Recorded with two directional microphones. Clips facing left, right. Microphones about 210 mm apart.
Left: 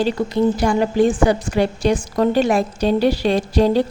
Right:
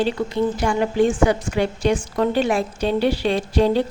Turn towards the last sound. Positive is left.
turn(degrees=40)  # may be behind; listen again after turning